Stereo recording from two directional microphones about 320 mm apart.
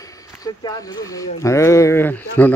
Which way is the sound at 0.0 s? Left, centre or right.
Centre.